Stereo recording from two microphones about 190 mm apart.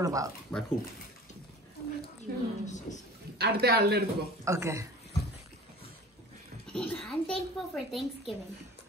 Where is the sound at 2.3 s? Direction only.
50° right (ahead or behind).